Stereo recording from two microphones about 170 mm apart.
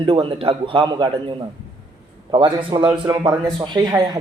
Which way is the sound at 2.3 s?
30° right (ahead or behind).